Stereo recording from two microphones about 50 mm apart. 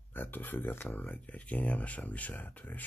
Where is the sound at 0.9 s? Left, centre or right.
Left.